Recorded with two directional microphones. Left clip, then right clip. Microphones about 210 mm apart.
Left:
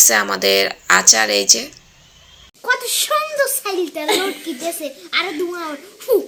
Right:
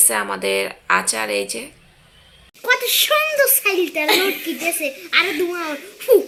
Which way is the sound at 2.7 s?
5° left (ahead or behind).